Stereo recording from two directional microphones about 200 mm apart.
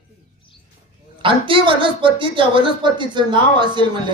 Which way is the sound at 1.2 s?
25° right (ahead or behind).